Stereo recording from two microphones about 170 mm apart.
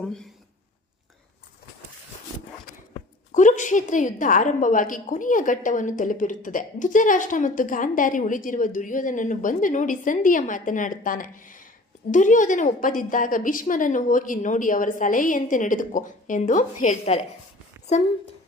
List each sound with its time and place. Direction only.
0.1 s speech: 5° left (ahead or behind)
3.3 s a woman's voice: 45° left (ahead or behind)
17.7 s a sound: 15° right (ahead or behind)